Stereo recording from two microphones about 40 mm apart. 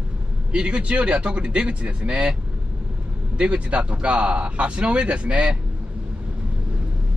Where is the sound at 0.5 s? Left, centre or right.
Right.